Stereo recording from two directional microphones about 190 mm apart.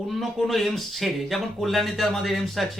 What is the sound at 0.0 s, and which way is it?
Speech, centre (ahead or behind).